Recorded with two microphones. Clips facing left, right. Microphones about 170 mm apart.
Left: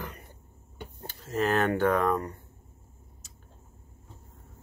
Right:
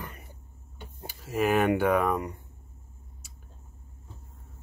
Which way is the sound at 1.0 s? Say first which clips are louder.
Right 1 dB; 10° right (ahead or behind).